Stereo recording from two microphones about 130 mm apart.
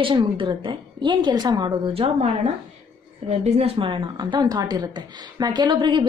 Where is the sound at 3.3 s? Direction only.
55° right (ahead or behind).